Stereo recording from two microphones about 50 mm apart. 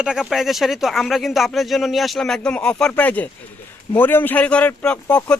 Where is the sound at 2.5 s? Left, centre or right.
Left.